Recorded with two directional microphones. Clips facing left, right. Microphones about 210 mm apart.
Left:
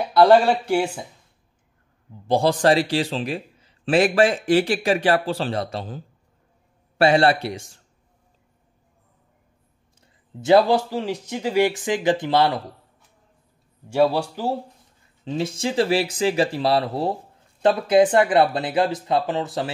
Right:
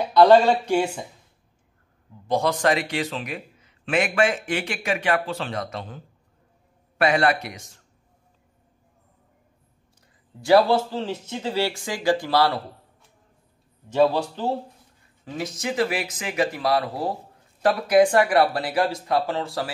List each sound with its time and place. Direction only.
0.2 s speech: 10° left (ahead or behind)
2.2 s a man's voice: 30° left (ahead or behind)
10.4 s speech: 20° left (ahead or behind)
13.9 s speech: 10° left (ahead or behind)
15.2 s speech: 25° left (ahead or behind)